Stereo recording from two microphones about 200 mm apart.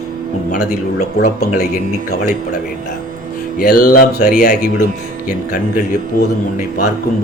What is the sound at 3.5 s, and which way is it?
Speech, 45° left (ahead or behind).